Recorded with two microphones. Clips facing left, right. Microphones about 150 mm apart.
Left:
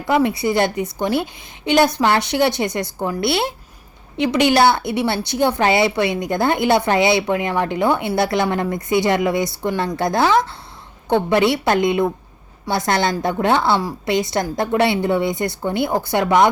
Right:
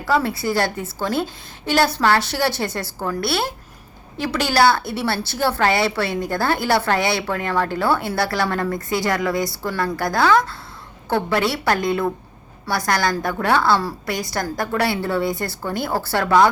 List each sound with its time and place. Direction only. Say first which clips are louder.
0.0 s a woman's voice: left 3 dB; 20° left (ahead or behind)